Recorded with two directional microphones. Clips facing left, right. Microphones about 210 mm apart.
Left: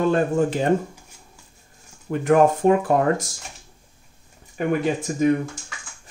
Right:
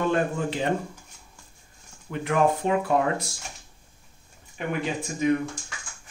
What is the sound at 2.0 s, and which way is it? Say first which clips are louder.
Speech: left 6 dB; 45° left (ahead or behind).